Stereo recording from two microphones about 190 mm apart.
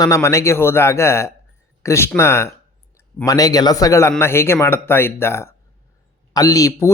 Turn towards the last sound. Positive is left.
turn(degrees=15)  # may be behind; listen again after turning